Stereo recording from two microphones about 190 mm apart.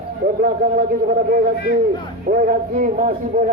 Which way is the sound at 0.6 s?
55° right (ahead or behind).